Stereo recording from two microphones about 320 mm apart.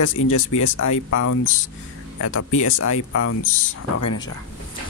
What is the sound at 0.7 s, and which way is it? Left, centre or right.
Speech, left.